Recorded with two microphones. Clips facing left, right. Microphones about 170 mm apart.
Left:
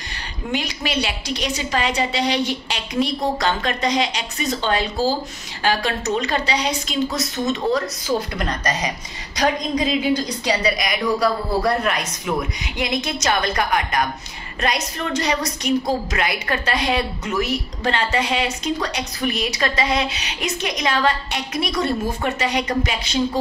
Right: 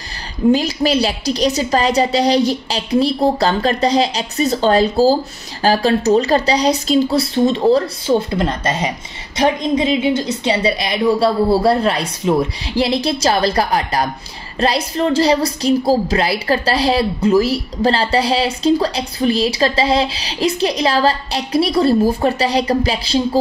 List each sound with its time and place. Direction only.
0.5 s a woman's voice: 35° right (ahead or behind)